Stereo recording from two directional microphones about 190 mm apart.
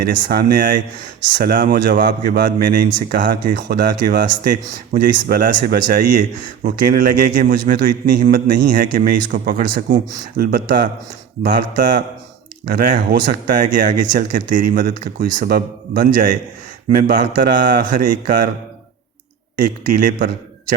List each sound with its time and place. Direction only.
0.0 s speech: 55° right (ahead or behind)
19.5 s speech: 45° right (ahead or behind)